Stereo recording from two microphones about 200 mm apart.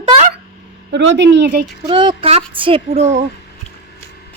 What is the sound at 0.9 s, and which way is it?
Speech, 60° right (ahead or behind).